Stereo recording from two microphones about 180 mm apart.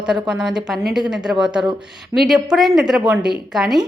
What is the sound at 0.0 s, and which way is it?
Speech, 5° right (ahead or behind).